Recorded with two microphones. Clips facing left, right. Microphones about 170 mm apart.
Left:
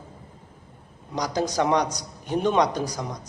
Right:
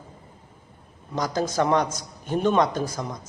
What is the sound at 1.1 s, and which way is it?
A man's voice, 15° left (ahead or behind).